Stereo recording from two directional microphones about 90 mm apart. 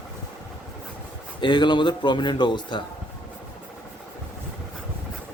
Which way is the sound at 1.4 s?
60° left (ahead or behind).